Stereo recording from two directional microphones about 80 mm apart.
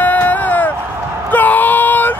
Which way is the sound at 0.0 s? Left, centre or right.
Left.